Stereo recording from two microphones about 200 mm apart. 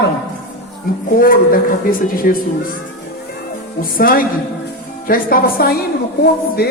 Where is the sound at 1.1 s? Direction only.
45° left (ahead or behind).